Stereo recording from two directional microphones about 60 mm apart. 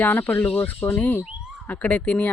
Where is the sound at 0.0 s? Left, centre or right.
Left.